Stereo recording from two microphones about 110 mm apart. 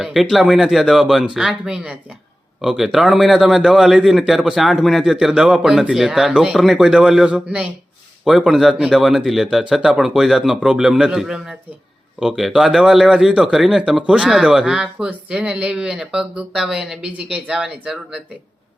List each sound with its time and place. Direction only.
0.0 s speech: centre (ahead or behind)